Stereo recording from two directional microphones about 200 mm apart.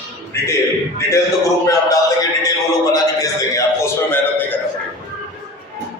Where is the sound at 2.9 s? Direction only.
15° left (ahead or behind).